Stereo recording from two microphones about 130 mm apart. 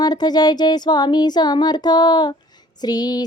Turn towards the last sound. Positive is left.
turn(degrees=30)  # may be behind; listen again after turning